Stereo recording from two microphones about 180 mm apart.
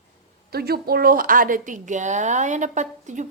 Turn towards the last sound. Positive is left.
turn(degrees=-40)  # may be behind; listen again after turning